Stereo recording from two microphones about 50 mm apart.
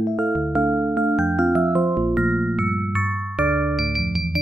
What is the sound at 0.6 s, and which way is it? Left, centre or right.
Music, centre.